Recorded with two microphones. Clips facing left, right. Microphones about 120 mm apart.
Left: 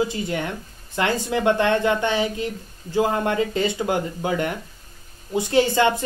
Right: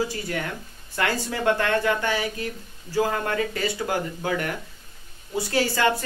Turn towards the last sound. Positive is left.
turn(degrees=20)  # may be behind; listen again after turning